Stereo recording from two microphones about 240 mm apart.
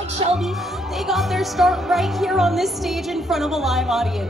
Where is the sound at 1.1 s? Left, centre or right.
Centre.